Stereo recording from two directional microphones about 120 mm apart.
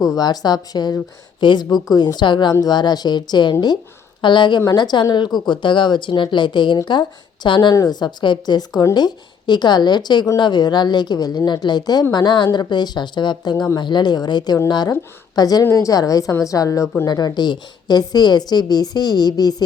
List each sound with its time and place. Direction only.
0.2 s a woman's voice: 35° left (ahead or behind)